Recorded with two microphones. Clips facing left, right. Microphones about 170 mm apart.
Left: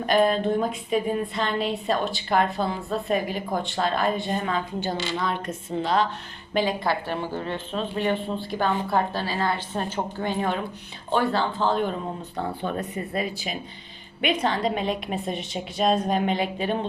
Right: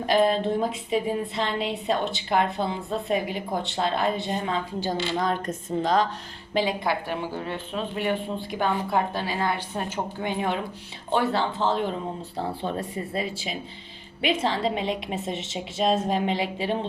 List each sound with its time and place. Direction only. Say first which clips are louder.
0.0 s a woman's voice: left 1 dB; 25° right (ahead or behind)
5.1 s a woman's voice: right 2 dB; 45° right (ahead or behind)
6.5 s a woman's voice: left 1 dB; 25° right (ahead or behind)
6.8 s a woman's voice: left 1 dB; 10° right (ahead or behind); by 16.7 s 25° right (ahead or behind)